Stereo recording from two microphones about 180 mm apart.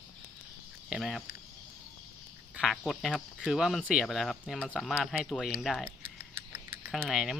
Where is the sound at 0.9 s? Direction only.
5° right (ahead or behind).